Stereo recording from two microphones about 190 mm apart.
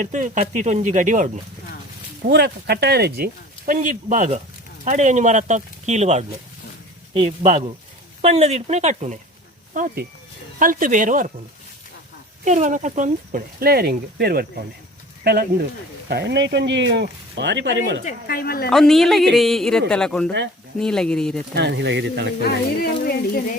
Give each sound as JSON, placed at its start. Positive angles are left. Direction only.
{"t": 0.0, "sound": "speech", "side_deg": -40}
{"t": 2.2, "sound": "speech", "side_deg": -60}
{"t": 3.7, "sound": "speech", "side_deg": -40}
{"t": 9.7, "sound": "speech", "side_deg": -50}
{"t": 12.5, "sound": "speech", "side_deg": -40}
{"t": 18.0, "sound": "speech", "side_deg": 50}
{"t": 18.7, "sound": "a woman's voice", "side_deg": 0}
{"t": 21.5, "sound": "speech", "side_deg": -65}
{"t": 22.4, "sound": "speech", "side_deg": 55}